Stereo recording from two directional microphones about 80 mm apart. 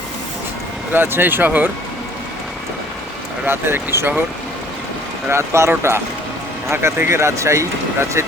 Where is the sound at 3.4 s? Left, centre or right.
Right.